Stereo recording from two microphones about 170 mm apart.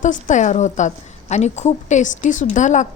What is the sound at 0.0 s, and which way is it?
A woman's voice, 50° left (ahead or behind).